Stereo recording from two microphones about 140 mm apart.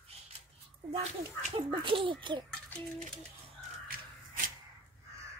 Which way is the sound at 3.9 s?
80° right.